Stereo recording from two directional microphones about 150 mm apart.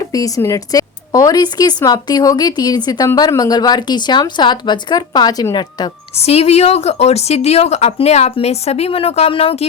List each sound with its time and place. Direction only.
0.0 s speech: 25° left (ahead or behind)
6.1 s speech: 45° left (ahead or behind)